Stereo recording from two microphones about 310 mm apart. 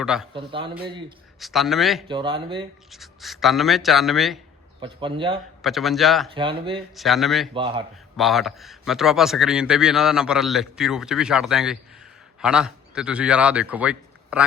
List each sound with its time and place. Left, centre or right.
0.0 s speech: centre
0.3 s speech: centre
1.4 s speech: centre
2.0 s speech: centre
2.9 s speech: centre
4.8 s speech: centre
5.6 s speech: centre
6.3 s speech: centre
6.9 s speech: centre
7.5 s speech: centre
8.1 s a man's voice: centre